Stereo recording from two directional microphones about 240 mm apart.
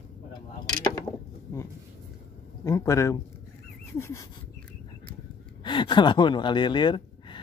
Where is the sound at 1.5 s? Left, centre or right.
Centre.